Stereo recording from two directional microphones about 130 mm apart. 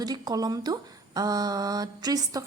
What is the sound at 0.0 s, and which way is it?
A woman's voice, 30° right (ahead or behind).